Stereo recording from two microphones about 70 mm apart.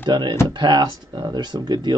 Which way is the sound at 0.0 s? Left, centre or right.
Right.